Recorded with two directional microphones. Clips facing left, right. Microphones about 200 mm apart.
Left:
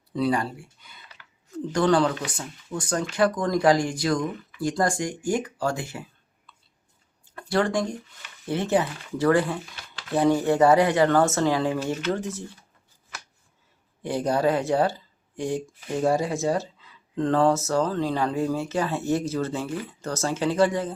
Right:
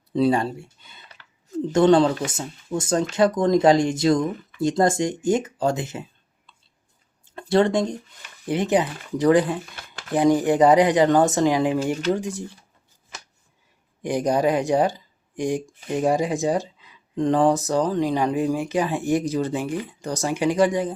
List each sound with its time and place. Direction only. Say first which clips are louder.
0.1 s speech: right 5 dB; 25° right (ahead or behind)
14.0 s speech: right 2 dB; 15° right (ahead or behind)